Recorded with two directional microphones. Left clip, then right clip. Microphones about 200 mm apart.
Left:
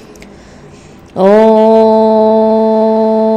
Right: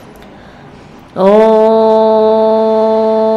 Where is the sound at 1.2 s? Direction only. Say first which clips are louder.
Left 1 dB; 25° left (ahead or behind).